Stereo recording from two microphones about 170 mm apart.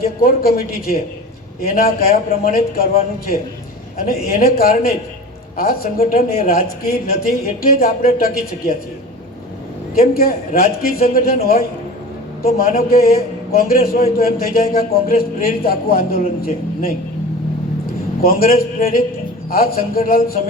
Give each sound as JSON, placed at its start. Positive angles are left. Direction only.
{"t": 0.0, "sound": "a man's voice", "side_deg": 60}
{"t": 4.4, "sound": "a man's voice", "side_deg": 60}
{"t": 9.9, "sound": "a man's voice", "side_deg": 60}
{"t": 18.2, "sound": "a man's voice", "side_deg": 60}